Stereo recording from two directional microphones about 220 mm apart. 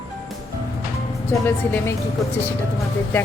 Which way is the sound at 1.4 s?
10° left (ahead or behind).